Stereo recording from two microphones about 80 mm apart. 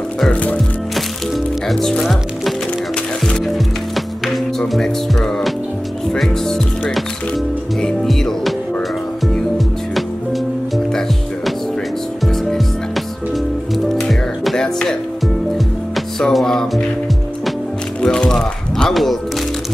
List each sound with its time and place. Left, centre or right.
0.3 s music: centre
1.7 s speech: centre
3.3 s music: centre
10.9 s music: centre
16.2 s music: centre
18.0 s music: centre